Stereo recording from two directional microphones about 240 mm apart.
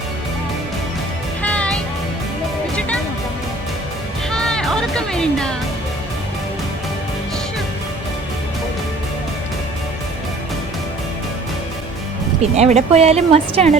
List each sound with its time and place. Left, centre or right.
1.4 s music: centre
4.3 s music: centre
12.4 s speech: right